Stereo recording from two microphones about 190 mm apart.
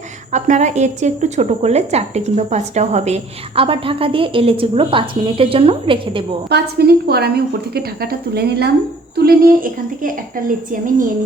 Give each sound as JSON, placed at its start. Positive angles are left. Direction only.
{"t": 0.3, "sound": "a woman's voice", "side_deg": -40}
{"t": 6.5, "sound": "a woman's voice", "side_deg": -55}